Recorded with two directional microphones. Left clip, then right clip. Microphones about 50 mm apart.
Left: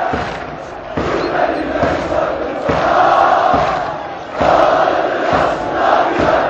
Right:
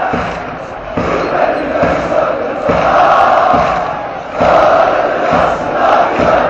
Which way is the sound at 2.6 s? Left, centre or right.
Right.